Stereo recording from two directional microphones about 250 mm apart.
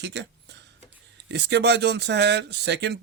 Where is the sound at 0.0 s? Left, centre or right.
Right.